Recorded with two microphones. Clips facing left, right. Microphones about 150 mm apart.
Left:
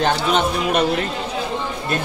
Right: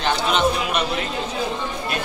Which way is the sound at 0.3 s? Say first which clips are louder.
Left 2 dB; 50° left (ahead or behind).